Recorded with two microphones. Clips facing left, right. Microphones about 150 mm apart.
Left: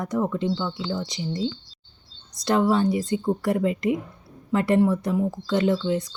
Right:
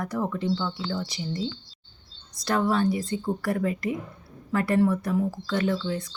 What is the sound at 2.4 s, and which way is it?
Speech, 20° left (ahead or behind).